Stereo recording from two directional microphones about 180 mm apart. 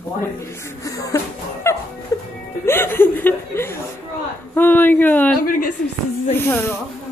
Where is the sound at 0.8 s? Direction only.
20° left (ahead or behind).